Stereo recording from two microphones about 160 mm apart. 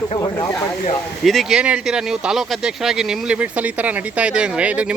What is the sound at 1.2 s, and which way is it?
Speech, centre (ahead or behind).